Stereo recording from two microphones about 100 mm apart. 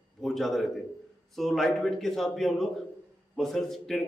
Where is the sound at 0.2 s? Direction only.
Centre (ahead or behind).